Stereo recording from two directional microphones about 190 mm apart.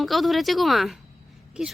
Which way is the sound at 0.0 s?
Centre (ahead or behind).